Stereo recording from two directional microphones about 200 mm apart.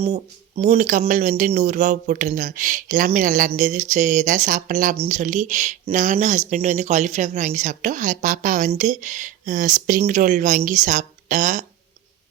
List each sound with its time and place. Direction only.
0.0 s speech: 30° right (ahead or behind)
0.8 s a woman's voice: 45° right (ahead or behind)